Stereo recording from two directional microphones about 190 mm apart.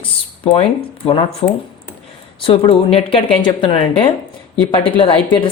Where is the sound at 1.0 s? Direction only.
30° left (ahead or behind).